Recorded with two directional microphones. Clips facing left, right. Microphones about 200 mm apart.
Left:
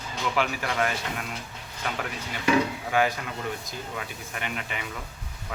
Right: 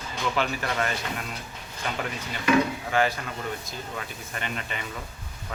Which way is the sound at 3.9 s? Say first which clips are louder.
Even; 10° left (ahead or behind).